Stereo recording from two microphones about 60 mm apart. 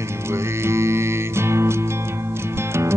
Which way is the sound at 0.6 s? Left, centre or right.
Right.